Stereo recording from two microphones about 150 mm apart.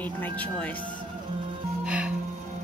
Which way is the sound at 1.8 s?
5° right (ahead or behind).